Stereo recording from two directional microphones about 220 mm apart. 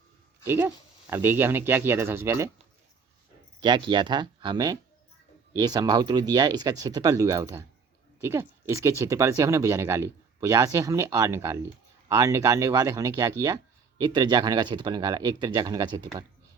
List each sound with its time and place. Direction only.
0.4 s speech: 10° right (ahead or behind)
3.6 s speech: 20° right (ahead or behind)